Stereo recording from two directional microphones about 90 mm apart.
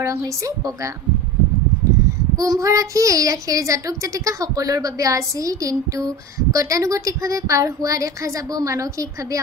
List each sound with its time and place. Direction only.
2.3 s a child's voice: 40° right (ahead or behind)